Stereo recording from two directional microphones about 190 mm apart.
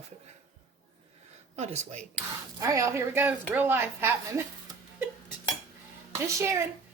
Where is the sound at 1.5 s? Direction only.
35° right (ahead or behind).